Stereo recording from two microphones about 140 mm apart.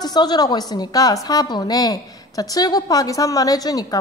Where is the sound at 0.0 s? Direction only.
30° left (ahead or behind).